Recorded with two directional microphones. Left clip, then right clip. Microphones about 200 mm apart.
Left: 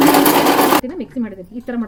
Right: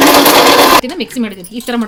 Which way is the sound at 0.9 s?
55° right (ahead or behind).